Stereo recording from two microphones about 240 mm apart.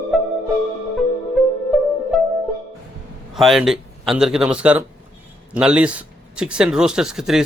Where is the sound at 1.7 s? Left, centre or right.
Centre.